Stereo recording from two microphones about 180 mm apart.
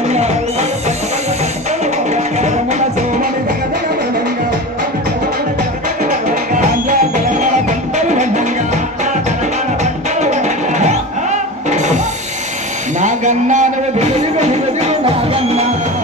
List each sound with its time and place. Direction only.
0.1 s music: 40° right (ahead or behind)
2.0 s music: 40° right (ahead or behind)
8.1 s music: 40° right (ahead or behind)
10.3 s music: 40° right (ahead or behind)
13.0 s music: 40° right (ahead or behind)